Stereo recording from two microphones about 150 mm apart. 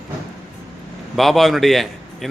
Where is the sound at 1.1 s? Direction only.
Centre (ahead or behind).